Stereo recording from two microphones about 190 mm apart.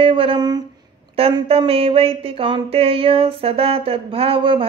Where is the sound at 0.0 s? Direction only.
30° right (ahead or behind).